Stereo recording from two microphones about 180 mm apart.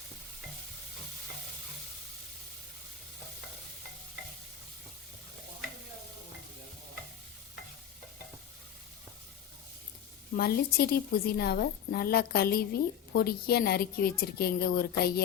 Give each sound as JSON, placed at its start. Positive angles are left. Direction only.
{"t": 10.3, "sound": "a woman's voice", "side_deg": 60}